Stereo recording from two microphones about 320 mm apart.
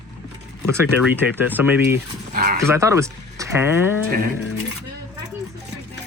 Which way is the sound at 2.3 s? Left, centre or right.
Right.